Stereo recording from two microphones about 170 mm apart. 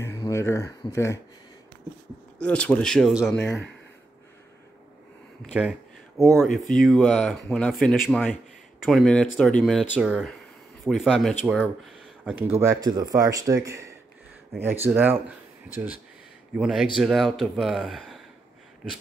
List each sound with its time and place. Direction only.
0.0 s speech: 15° left (ahead or behind)
2.4 s speech: 5° left (ahead or behind)
5.5 s a sound: 5° right (ahead or behind)
6.7 s speech: centre (ahead or behind)
12.4 s speech: 15° right (ahead or behind)
16.5 s speech: centre (ahead or behind)